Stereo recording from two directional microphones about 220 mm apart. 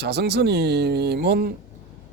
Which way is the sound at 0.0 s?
50° right (ahead or behind).